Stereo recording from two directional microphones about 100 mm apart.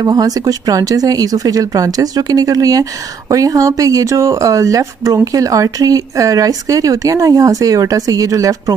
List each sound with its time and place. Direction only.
0.0 s speech: 40° right (ahead or behind)